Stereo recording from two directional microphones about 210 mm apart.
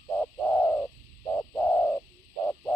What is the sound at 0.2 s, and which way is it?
Bird, 5° left (ahead or behind).